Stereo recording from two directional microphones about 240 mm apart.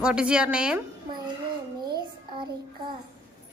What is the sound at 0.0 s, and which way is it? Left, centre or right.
Speech, centre.